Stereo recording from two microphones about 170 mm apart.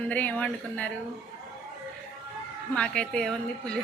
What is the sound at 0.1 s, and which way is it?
Speech, 10° left (ahead or behind).